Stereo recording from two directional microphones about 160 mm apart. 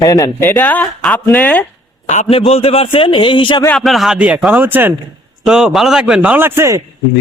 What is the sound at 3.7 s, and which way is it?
A man's voice, centre (ahead or behind).